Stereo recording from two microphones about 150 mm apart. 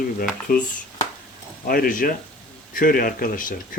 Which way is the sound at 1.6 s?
75° left (ahead or behind).